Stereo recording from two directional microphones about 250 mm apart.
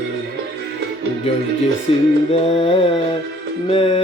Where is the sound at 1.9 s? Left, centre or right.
Left.